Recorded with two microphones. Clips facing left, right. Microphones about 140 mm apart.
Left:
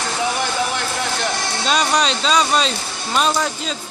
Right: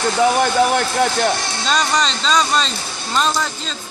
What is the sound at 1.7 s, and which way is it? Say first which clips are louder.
A man's voice: even; 10° left (ahead or behind).